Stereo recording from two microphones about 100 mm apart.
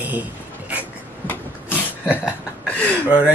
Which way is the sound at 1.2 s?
20° left (ahead or behind).